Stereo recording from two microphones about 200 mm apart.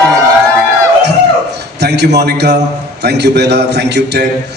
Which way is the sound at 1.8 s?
55° right (ahead or behind).